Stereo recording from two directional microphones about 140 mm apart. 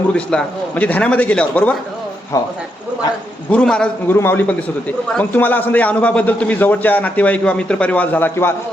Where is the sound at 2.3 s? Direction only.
25° left (ahead or behind).